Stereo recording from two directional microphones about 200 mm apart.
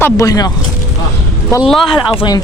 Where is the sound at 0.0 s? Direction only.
15° left (ahead or behind).